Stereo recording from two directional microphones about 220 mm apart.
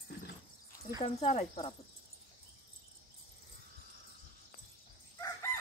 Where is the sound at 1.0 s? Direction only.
25° left (ahead or behind).